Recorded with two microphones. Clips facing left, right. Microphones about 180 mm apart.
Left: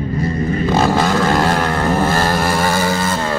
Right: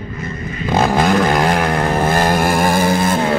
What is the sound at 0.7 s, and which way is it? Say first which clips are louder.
Vehicle: right 3 dB; 15° right (ahead or behind).